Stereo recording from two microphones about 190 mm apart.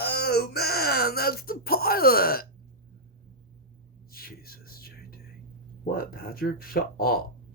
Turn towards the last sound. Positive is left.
turn(degrees=50)  # may be behind; listen again after turning